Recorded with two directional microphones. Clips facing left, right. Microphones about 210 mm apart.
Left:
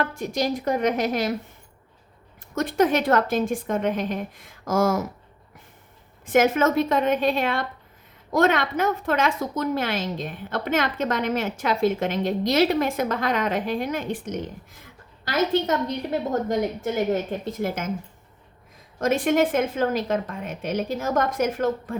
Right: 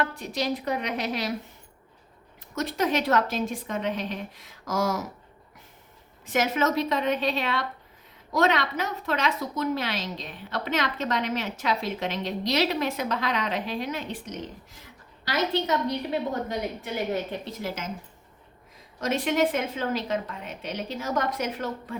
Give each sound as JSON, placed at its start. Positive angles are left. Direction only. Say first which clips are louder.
{"t": 0.0, "sound": "a woman's voice", "louder": "left 4 dB", "side_deg": 45}
{"t": 2.6, "sound": "a woman's voice", "louder": "left 5 dB", "side_deg": 50}
{"t": 6.2, "sound": "a woman's voice", "louder": "left 6 dB", "side_deg": 50}
{"t": 18.9, "sound": "a woman's voice", "louder": "left 4 dB", "side_deg": 50}